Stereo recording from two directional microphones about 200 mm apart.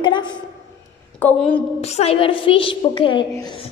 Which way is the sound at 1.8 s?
30° left (ahead or behind).